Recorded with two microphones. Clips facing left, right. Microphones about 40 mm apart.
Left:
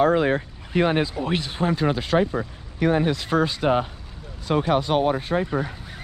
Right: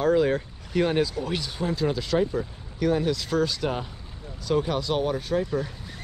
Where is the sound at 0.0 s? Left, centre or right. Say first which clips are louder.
Left 3 dB; left.